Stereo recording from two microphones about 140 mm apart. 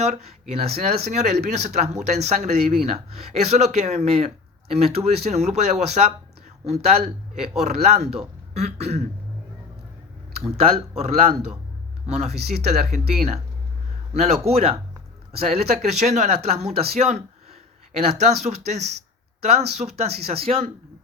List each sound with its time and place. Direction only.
0.0 s speech: 50° right (ahead or behind)
10.4 s speech: 45° right (ahead or behind)